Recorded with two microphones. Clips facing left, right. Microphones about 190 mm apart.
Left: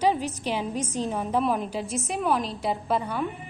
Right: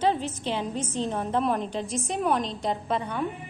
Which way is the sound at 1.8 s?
35° right (ahead or behind).